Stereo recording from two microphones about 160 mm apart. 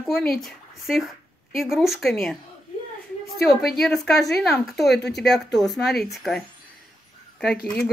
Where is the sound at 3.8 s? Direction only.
Centre (ahead or behind).